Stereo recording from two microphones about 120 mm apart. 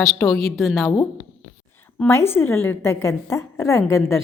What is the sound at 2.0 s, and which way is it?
A woman's voice, 20° left (ahead or behind).